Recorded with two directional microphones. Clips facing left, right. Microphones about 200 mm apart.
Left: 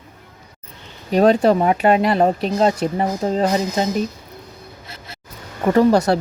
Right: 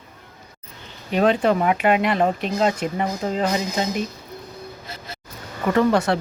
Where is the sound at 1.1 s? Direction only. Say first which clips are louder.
Left 4 dB; 40° left (ahead or behind).